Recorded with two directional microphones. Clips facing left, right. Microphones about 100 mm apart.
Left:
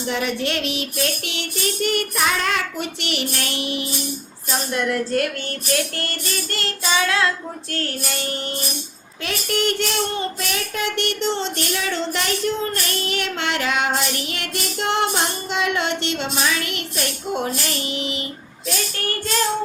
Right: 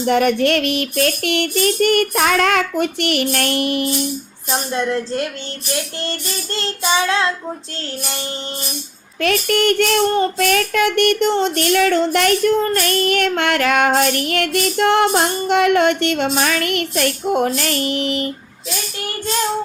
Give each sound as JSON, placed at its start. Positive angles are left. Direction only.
{"t": 0.0, "sound": "child singing", "side_deg": -55}
{"t": 4.5, "sound": "child singing", "side_deg": -30}
{"t": 9.2, "sound": "child singing", "side_deg": -55}
{"t": 17.6, "sound": "music", "side_deg": -55}